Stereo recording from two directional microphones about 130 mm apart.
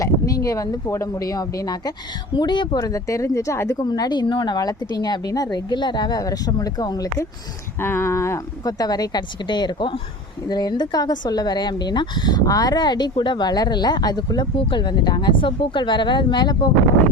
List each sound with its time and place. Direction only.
0.0 s speech: 25° left (ahead or behind)
3.8 s speech: 30° left (ahead or behind)
7.8 s speech: 20° left (ahead or behind); by 16.6 s 35° left (ahead or behind)